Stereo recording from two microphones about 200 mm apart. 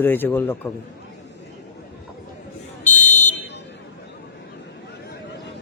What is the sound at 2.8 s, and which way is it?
Fire alarm, 40° left (ahead or behind).